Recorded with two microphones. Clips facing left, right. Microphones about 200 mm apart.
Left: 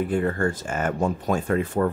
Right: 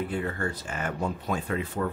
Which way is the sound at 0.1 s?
50° left (ahead or behind).